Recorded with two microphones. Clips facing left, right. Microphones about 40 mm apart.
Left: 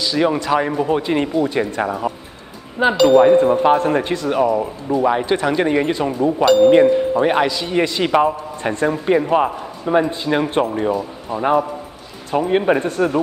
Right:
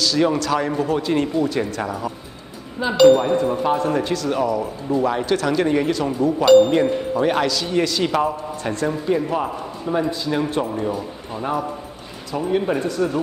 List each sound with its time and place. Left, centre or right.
0.0 s a man's voice: left
2.8 s a man's voice: left
6.4 s speech: centre
6.7 s a man's voice: left
12.3 s speech: left